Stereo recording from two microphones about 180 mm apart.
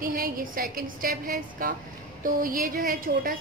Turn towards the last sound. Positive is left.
turn(degrees=-50)  # may be behind; listen again after turning